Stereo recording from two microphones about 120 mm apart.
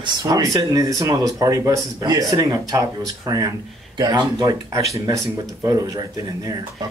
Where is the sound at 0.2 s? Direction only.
30° right (ahead or behind).